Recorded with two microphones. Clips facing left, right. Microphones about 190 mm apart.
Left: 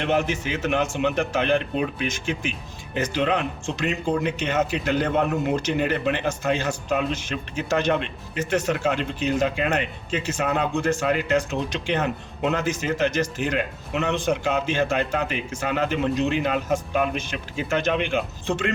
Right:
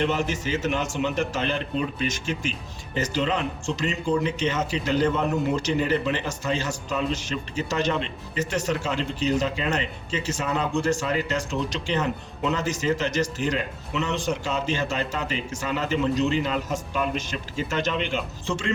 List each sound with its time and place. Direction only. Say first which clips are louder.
0.0 s a man's voice: left 2 dB; 55° left (ahead or behind)